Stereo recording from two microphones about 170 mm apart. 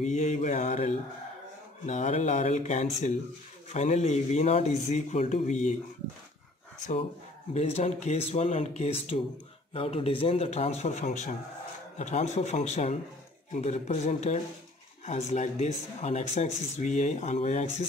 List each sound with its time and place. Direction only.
0.0 s speech: 45° left (ahead or behind)
7.5 s speech: 35° left (ahead or behind)